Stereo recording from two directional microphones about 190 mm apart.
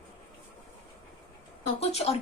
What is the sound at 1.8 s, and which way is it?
Speech, 35° left (ahead or behind).